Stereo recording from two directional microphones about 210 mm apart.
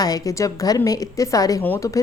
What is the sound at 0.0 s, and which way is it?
A woman's voice, 15° left (ahead or behind).